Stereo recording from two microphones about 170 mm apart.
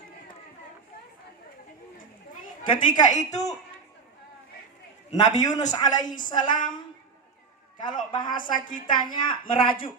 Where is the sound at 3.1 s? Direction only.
45° left (ahead or behind).